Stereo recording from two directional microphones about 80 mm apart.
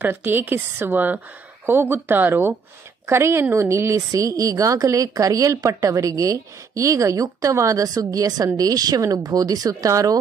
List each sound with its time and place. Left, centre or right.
0.0 s a woman's voice: right